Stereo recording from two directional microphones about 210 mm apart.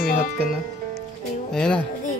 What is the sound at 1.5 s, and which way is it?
Music, 5° left (ahead or behind).